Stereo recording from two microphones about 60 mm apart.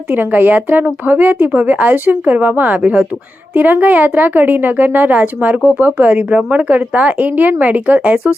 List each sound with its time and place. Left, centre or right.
0.1 s a woman's voice: right